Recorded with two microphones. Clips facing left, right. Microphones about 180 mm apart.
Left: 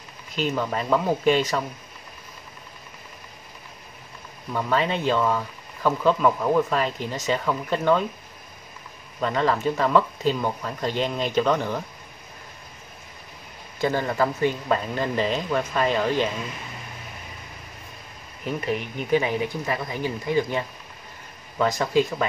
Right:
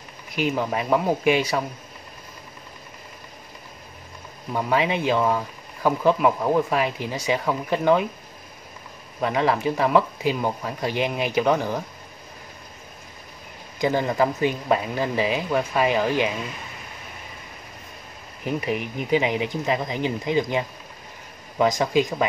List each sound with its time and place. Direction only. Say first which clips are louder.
0.3 s speech: right 2 dB; 10° right (ahead or behind)
4.5 s speech: right 1 dB; 15° right (ahead or behind)
9.2 s speech: right 1 dB; 10° right (ahead or behind)
13.7 s speech: right 2 dB; 15° right (ahead or behind)
18.7 s speech: left 1 dB; 15° right (ahead or behind)